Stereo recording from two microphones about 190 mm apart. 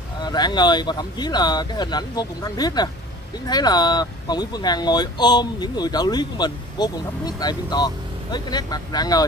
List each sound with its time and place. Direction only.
0.2 s speech: 20° left (ahead or behind)